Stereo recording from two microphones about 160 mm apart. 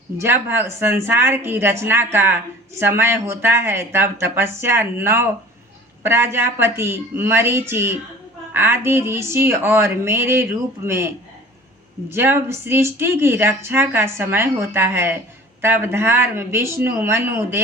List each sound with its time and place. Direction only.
0.2 s speech: 15° right (ahead or behind)
12.1 s speech: 15° right (ahead or behind)